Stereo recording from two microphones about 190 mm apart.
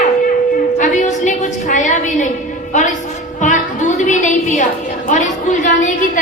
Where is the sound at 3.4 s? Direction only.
40° left (ahead or behind).